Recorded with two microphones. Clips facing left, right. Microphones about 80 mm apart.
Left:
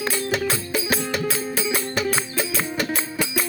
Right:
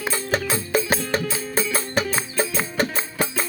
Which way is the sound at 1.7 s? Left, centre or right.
Right.